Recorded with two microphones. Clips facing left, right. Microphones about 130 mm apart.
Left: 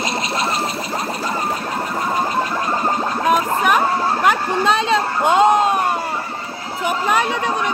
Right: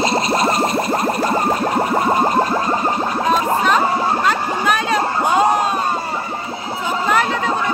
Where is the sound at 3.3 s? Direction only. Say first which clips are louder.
Even; 10° left (ahead or behind).